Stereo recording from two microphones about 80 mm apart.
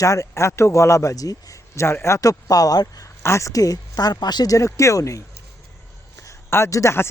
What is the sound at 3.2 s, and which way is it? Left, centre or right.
Speech, left.